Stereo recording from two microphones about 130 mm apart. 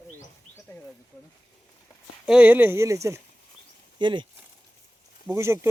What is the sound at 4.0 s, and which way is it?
Speech, 35° right (ahead or behind).